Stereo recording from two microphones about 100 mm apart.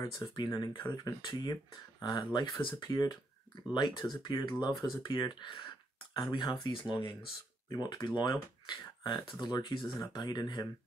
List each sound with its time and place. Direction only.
0.0 s speech: 40° left (ahead or behind)
7.7 s speech: 40° left (ahead or behind)